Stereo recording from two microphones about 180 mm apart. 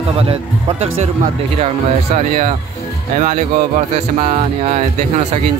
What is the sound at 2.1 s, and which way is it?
A man's voice, 40° right (ahead or behind).